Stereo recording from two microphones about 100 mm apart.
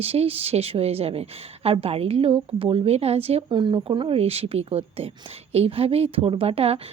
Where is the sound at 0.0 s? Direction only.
85° right.